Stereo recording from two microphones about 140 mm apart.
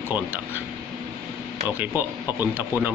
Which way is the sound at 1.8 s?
15° right (ahead or behind).